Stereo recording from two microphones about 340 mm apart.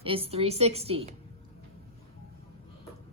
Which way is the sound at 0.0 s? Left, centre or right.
Centre.